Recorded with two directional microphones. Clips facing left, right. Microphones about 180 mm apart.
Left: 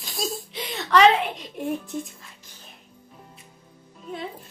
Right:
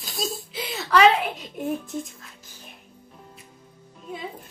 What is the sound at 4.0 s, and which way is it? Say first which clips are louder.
Speech: left 1 dB; 10° right (ahead or behind).